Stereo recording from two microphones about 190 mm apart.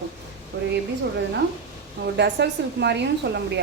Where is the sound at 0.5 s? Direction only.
60° right (ahead or behind).